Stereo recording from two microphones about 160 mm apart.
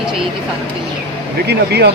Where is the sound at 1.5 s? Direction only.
90° right.